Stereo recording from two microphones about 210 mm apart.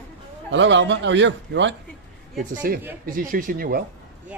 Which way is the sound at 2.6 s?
45° right (ahead or behind).